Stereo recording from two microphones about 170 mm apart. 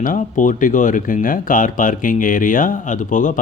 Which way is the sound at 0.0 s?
50° left (ahead or behind).